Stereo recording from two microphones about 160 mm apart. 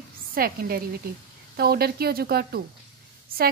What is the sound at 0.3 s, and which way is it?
A woman's voice, 65° right (ahead or behind).